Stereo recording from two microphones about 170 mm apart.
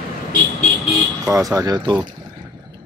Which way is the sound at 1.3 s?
20° right (ahead or behind).